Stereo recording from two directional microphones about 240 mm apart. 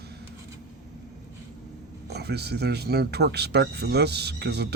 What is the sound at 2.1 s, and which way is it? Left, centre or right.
Speech, right.